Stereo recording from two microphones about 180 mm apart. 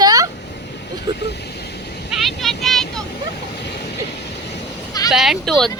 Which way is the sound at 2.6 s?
Centre (ahead or behind).